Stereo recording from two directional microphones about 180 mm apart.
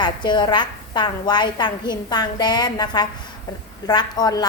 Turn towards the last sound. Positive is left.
turn(degrees=20)  # may be behind; listen again after turning